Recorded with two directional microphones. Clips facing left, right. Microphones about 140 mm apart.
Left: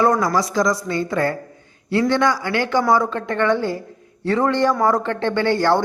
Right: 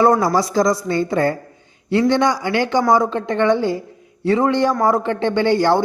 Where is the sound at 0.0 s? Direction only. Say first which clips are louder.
Right 3 dB; 30° right (ahead or behind).